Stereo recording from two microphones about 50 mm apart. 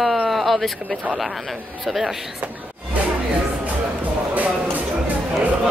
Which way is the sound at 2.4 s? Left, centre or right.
Right.